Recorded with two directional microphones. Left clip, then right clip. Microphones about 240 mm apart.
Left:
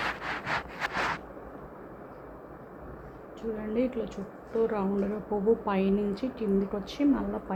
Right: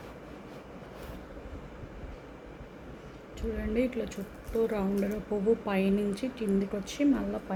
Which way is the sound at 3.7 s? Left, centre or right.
Centre.